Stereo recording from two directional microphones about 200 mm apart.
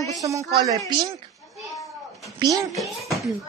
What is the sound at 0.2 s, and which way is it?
Speech, 15° right (ahead or behind).